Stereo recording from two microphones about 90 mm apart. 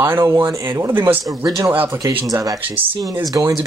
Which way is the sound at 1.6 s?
25° right (ahead or behind).